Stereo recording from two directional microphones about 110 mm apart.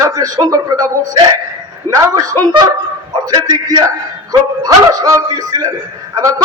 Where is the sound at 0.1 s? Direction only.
35° right (ahead or behind).